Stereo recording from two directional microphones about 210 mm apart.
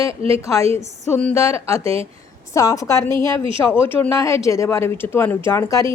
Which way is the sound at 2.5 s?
15° left (ahead or behind).